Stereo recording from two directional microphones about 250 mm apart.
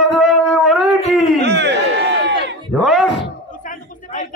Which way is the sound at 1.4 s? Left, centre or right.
Right.